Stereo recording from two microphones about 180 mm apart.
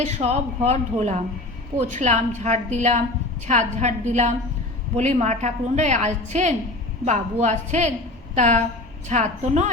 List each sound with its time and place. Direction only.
0.0 s a woman's voice: 40° right (ahead or behind)